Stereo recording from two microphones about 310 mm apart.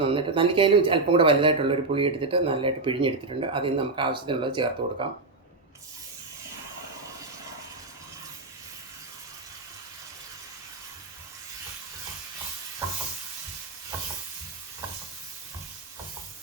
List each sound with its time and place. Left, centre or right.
0.0 s speech: centre